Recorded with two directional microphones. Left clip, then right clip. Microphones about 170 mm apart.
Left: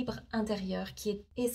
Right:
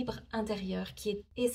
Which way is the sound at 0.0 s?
20° right (ahead or behind).